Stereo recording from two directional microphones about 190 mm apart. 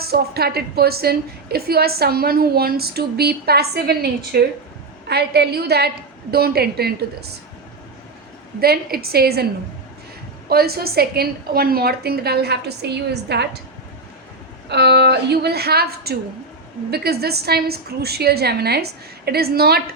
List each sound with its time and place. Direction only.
0.1 s a woman's voice: 55° right (ahead or behind)
8.6 s a woman's voice: 55° right (ahead or behind)
10.5 s a woman's voice: 55° right (ahead or behind)
14.7 s a woman's voice: 60° right (ahead or behind)